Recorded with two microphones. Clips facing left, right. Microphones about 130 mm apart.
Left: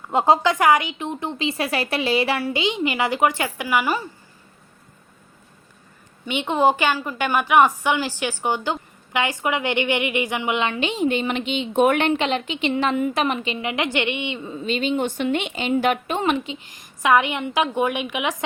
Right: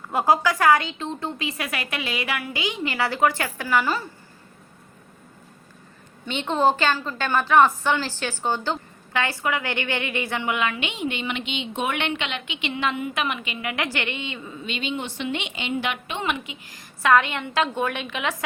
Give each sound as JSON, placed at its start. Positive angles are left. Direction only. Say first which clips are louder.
{"t": 0.1, "sound": "a woman's voice", "louder": "left 3 dB", "side_deg": 25}
{"t": 6.2, "sound": "a woman's voice", "louder": "left 2 dB", "side_deg": 10}
{"t": 14.5, "sound": "a woman's voice", "louder": "left 7 dB", "side_deg": 35}
{"t": 16.7, "sound": "a woman's voice", "louder": "left 1 dB", "side_deg": 15}